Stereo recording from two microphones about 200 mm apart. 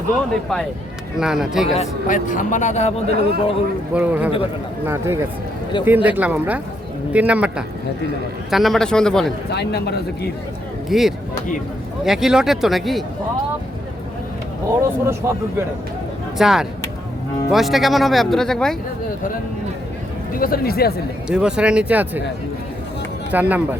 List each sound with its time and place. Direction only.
1.1 s speech: 5° right (ahead or behind)
1.7 s a man's voice: 35° left (ahead or behind)
3.9 s speech: 5° right (ahead or behind)
9.5 s speech: 55° left (ahead or behind)
10.8 s speech: centre (ahead or behind)
14.8 s speech: 15° right (ahead or behind)
16.4 s speech: centre (ahead or behind)
20.3 s speech: 45° left (ahead or behind)
21.2 s speech: 5° right (ahead or behind)
23.3 s speech: 10° right (ahead or behind)